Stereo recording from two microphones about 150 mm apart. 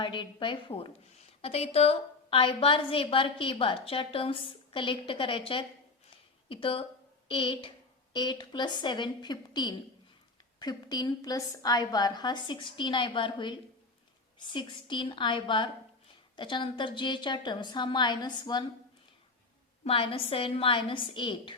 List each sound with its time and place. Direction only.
0.0 s a woman's voice: 30° left (ahead or behind)
19.8 s a woman's voice: 40° left (ahead or behind)